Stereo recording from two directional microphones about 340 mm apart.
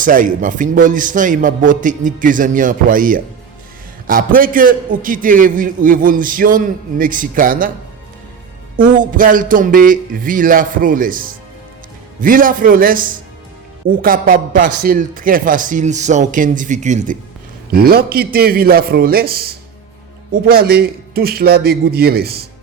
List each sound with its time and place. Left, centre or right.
0.0 s a man's voice: right
8.7 s a man's voice: right